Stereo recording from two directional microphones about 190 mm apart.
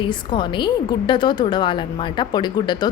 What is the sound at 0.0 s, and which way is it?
A woman's voice, 25° left (ahead or behind).